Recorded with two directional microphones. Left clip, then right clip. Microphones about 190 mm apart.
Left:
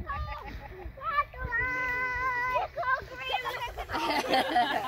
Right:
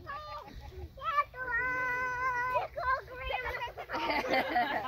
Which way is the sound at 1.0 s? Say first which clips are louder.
Left 1 dB; 10° right (ahead or behind).